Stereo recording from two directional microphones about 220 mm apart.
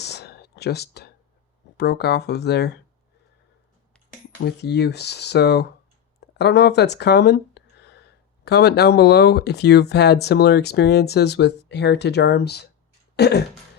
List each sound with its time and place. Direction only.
0.0 s whispering: 50° left (ahead or behind)
1.7 s speech: 50° left (ahead or behind)
4.4 s speech: 50° left (ahead or behind)
6.1 s a sound: 50° left (ahead or behind)
8.4 s speech: 50° left (ahead or behind)
13.1 s throat clearing: 50° left (ahead or behind)